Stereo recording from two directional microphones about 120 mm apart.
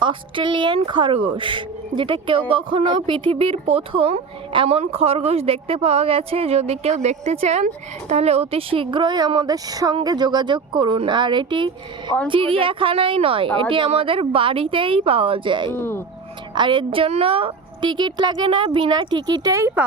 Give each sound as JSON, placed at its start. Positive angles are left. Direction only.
{"t": 0.0, "sound": "a woman's voice", "side_deg": -40}
{"t": 15.7, "sound": "speech", "side_deg": 20}
{"t": 16.6, "sound": "a woman's voice", "side_deg": -40}